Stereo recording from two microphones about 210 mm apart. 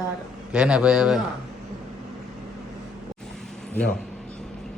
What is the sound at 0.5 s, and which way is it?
Speech, 5° right (ahead or behind).